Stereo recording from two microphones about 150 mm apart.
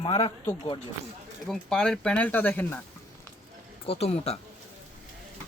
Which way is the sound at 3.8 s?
40° left (ahead or behind).